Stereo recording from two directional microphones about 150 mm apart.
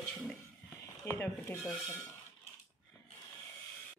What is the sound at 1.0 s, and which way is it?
Speech, 15° left (ahead or behind).